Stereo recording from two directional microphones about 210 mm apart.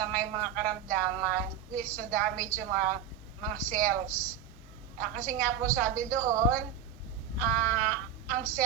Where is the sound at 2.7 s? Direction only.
40° right (ahead or behind).